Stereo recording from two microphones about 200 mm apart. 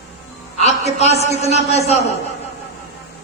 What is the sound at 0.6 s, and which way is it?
A man's voice, 30° left (ahead or behind).